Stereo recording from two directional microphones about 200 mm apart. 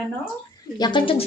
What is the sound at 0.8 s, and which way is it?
Speech, 25° left (ahead or behind).